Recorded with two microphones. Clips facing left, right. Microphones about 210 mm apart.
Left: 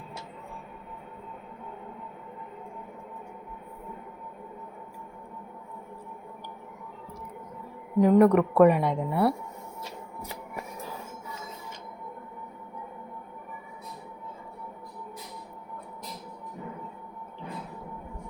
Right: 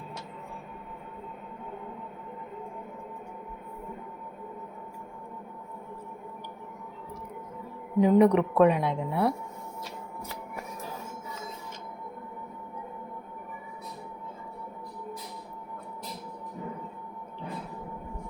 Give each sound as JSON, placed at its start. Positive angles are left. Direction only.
{"t": 8.0, "sound": "a woman's voice", "side_deg": 0}